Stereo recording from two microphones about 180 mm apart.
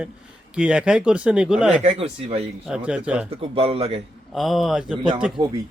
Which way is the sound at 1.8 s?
35° right (ahead or behind).